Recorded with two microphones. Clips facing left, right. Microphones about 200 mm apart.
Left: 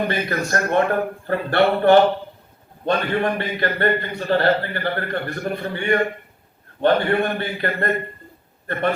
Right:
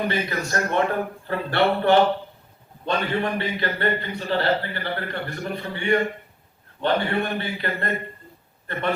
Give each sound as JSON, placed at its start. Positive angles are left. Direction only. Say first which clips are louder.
{"t": 0.1, "sound": "a man's voice", "louder": "left 3 dB", "side_deg": 50}